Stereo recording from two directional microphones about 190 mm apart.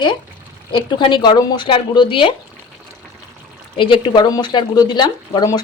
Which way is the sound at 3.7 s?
25° left (ahead or behind).